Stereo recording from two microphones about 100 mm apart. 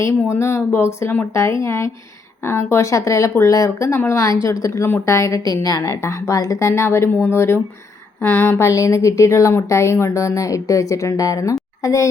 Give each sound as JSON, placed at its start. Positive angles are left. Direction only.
{"t": 0.0, "sound": "a woman's voice", "side_deg": 30}